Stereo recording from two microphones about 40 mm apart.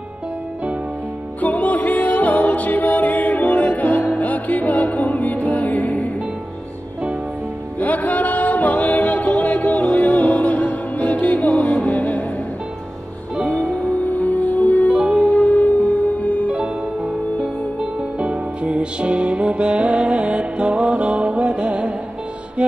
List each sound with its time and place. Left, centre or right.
1.4 s music: left
7.8 s music: left
14.1 s music: left
16.4 s music: right
18.1 s music: right